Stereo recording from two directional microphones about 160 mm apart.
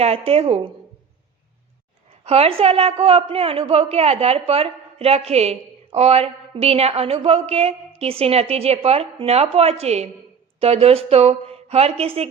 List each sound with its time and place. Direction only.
0.0 s a man's voice: 40° right (ahead or behind)
2.2 s a man's voice: 40° right (ahead or behind)